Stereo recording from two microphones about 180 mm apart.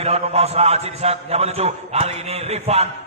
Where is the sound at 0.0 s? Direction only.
35° right (ahead or behind).